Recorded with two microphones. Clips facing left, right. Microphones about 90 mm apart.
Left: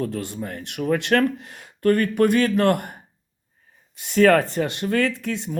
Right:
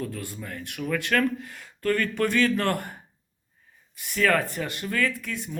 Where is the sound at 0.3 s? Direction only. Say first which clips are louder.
Left 6 dB; 45° left (ahead or behind).